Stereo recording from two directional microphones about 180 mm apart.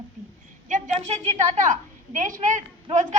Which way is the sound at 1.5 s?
45° right (ahead or behind).